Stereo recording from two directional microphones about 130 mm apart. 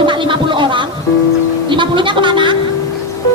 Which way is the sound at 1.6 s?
40° right (ahead or behind).